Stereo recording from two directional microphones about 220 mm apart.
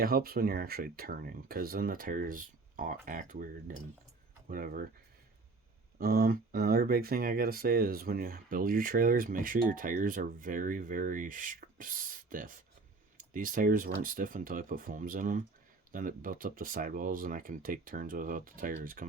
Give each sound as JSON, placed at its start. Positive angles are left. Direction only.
{"t": 0.0, "sound": "speech", "side_deg": -45}
{"t": 6.0, "sound": "speech", "side_deg": -45}